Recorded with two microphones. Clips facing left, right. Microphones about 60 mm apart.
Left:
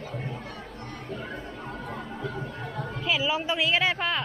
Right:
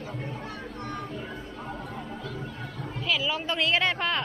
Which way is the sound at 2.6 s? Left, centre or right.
Left.